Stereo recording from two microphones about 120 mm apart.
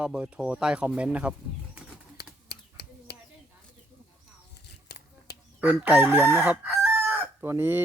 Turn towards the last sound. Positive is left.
turn(degrees=-20)  # may be behind; listen again after turning